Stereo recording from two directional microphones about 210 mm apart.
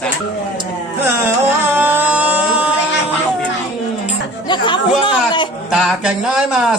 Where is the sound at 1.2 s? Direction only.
10° right (ahead or behind).